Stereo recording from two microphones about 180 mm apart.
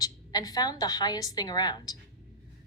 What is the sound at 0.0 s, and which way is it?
A woman's voice, 20° left (ahead or behind).